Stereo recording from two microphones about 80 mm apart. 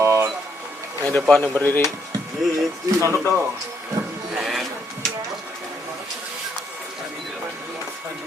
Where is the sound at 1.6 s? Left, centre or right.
Left.